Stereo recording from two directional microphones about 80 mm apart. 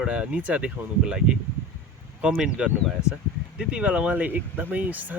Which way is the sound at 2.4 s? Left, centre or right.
Centre.